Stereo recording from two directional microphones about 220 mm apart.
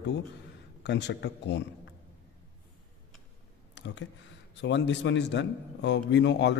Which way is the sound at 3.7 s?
55° left (ahead or behind).